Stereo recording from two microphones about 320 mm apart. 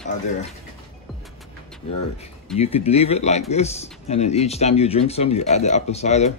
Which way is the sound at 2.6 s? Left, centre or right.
Centre.